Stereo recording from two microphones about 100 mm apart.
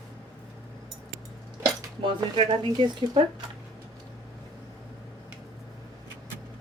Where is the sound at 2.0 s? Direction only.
55° right (ahead or behind).